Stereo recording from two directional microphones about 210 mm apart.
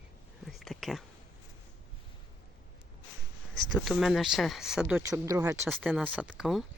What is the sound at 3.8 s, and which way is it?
Speech, centre (ahead or behind).